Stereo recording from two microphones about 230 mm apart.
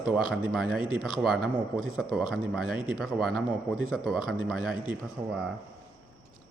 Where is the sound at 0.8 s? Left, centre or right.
Left.